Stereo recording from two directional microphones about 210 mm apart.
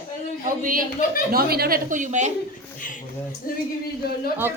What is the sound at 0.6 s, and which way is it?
A woman's voice, 40° right (ahead or behind).